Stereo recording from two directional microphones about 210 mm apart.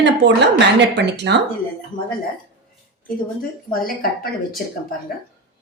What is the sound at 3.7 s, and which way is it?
Speech, 45° left (ahead or behind).